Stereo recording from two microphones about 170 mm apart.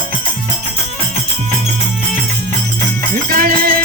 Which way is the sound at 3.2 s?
60° right (ahead or behind).